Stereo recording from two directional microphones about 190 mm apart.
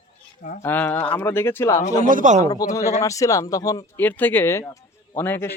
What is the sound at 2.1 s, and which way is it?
Speech, 40° right (ahead or behind).